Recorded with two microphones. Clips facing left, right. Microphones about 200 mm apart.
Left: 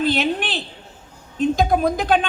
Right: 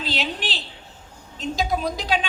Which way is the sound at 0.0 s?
55° left (ahead or behind).